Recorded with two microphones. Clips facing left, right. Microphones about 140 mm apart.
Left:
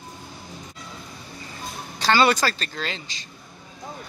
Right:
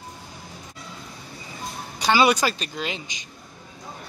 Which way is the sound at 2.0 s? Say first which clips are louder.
Even; 10° right (ahead or behind).